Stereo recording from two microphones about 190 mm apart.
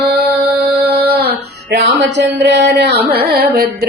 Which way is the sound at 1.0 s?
55° right (ahead or behind).